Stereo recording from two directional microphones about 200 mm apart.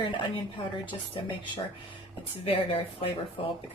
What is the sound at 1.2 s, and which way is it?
Speech, 25° left (ahead or behind).